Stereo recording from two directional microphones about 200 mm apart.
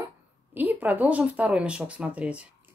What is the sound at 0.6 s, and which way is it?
A woman's voice, 10° right (ahead or behind).